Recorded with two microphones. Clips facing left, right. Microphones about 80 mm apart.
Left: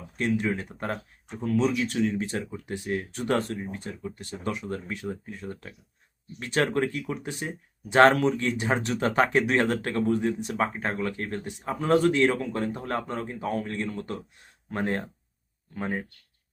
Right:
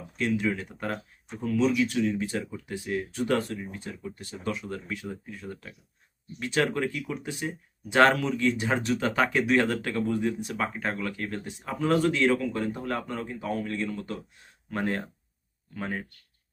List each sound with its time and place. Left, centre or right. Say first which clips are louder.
0.4 s speech: even; left
1.5 s speech: even; left
1.8 s speech: right 1 dB; left